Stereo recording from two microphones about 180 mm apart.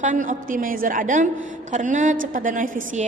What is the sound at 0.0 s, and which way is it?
A woman's voice, 45° right (ahead or behind).